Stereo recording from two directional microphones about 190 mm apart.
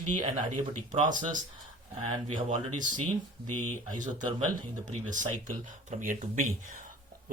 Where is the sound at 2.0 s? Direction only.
30° right (ahead or behind).